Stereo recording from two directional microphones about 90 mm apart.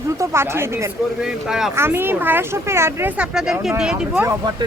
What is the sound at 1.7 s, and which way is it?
A woman's voice, 25° right (ahead or behind).